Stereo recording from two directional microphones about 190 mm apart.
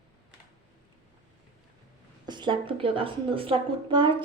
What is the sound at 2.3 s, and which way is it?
A woman's voice, 25° right (ahead or behind).